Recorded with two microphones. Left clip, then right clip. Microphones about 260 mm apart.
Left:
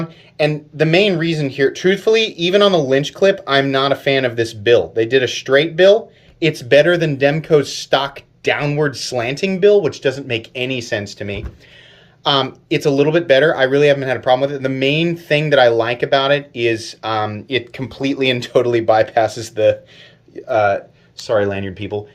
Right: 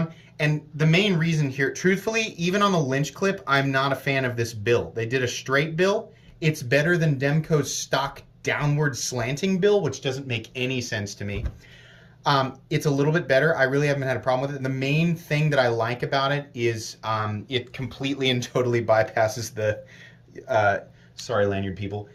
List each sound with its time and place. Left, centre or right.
0.3 s speech: centre
10.0 s speech: centre
21.2 s speech: centre